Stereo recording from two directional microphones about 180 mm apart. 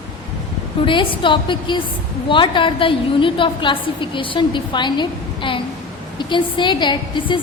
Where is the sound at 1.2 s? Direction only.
25° left (ahead or behind).